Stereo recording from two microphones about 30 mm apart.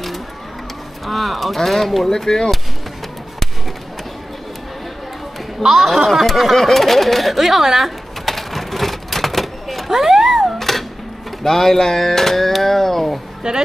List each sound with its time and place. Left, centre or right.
1.0 s speech: centre
2.0 s speech: centre
5.7 s speech: centre
6.5 s speech: centre
8.3 s typewriter: centre
9.8 s a sound: centre
10.6 s music: centre
11.4 s a sound: centre
13.4 s a woman's voice: right